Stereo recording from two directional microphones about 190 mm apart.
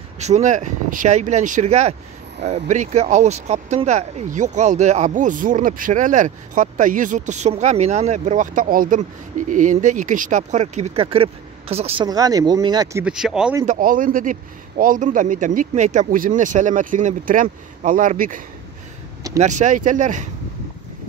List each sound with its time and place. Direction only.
0.2 s speech: 40° right (ahead or behind)
12.1 s speech: 20° right (ahead or behind)
13.0 s speech: 5° right (ahead or behind)
13.7 s speech: 45° right (ahead or behind)
19.4 s speech: 40° right (ahead or behind)